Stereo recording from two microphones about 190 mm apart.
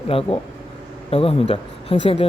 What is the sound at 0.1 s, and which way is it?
Speech, 30° left (ahead or behind).